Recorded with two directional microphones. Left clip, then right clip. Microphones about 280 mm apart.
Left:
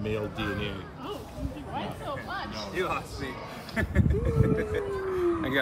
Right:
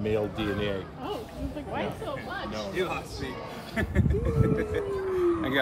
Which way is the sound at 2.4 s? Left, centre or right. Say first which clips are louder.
Right 2 dB; centre.